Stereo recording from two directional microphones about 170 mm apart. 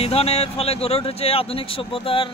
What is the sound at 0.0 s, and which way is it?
A man's voice, 35° left (ahead or behind).